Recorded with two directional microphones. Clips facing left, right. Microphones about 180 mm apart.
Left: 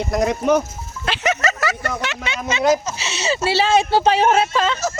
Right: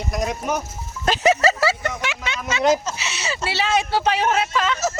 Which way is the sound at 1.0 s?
35° right (ahead or behind).